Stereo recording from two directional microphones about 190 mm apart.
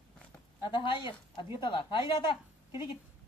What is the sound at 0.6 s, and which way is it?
A woman's voice, 25° left (ahead or behind).